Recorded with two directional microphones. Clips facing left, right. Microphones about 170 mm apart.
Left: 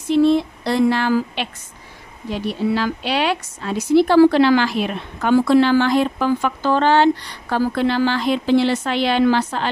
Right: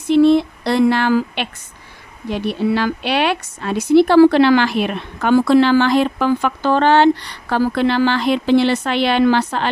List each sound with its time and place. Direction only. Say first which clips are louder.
0.1 s a woman's voice: right 3 dB; 70° right (ahead or behind)